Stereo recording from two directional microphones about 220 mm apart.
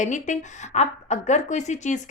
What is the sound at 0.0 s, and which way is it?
A woman's voice, 35° left (ahead or behind).